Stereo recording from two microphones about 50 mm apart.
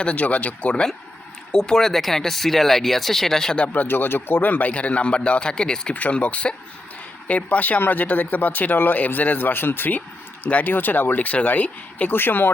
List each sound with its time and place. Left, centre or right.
0.0 s speech: left
1.5 s speech: centre
3.6 s speech: left; by 5.9 s centre
5.9 s speech: left
12.1 s speech: left